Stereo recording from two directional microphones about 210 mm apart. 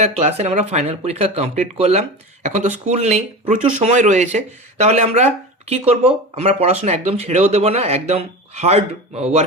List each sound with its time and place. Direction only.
0.0 s speech: 30° right (ahead or behind)